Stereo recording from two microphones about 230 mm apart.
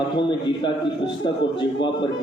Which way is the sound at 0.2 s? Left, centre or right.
Centre.